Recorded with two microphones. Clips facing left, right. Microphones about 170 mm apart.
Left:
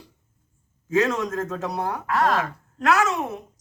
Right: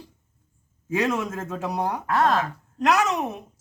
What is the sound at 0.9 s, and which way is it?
Speech, 10° right (ahead or behind).